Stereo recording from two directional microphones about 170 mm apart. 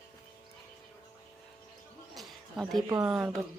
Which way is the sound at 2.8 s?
15° right (ahead or behind).